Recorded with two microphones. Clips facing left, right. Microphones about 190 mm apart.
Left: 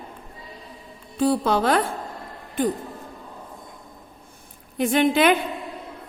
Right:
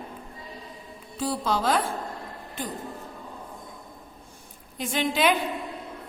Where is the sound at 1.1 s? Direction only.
60° left (ahead or behind).